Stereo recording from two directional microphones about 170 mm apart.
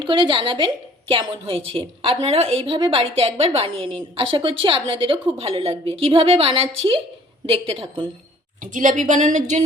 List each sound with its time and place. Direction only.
0.0 s a woman's voice: 30° right (ahead or behind)
8.7 s speech: 50° right (ahead or behind)